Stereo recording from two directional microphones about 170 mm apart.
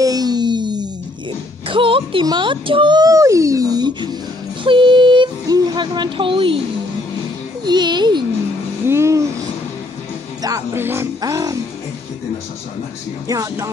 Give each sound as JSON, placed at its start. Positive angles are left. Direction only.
{"t": 0.0, "sound": "music", "side_deg": -20}
{"t": 4.6, "sound": "a sound", "side_deg": -30}
{"t": 7.6, "sound": "music", "side_deg": -25}
{"t": 8.8, "sound": "vehicle", "side_deg": -15}
{"t": 10.4, "sound": "music", "side_deg": -15}
{"t": 13.3, "sound": "music", "side_deg": -20}